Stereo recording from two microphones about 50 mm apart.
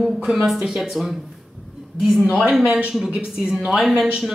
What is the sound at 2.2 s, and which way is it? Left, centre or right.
Speech, right.